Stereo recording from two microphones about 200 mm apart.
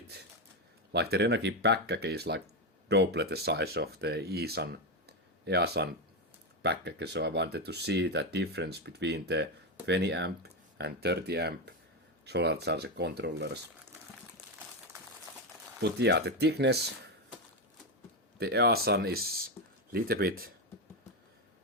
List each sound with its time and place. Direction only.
0.9 s speech: 55° right (ahead or behind)
15.8 s speech: 55° right (ahead or behind)
18.3 s speech: 55° right (ahead or behind)